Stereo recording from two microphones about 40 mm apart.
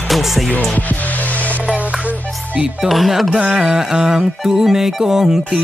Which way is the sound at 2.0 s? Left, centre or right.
Right.